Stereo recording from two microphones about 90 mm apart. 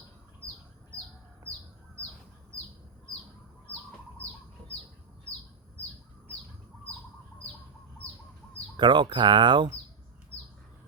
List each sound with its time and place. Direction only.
8.7 s speech: 55° right (ahead or behind)